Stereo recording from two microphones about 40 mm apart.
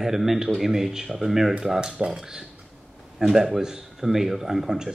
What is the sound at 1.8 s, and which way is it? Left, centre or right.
Speech, right.